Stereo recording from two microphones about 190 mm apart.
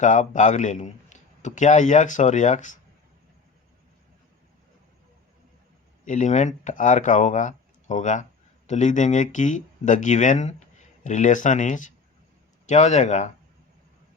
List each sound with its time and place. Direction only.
0.0 s a man's voice: 40° left (ahead or behind)
6.1 s a man's voice: 40° left (ahead or behind)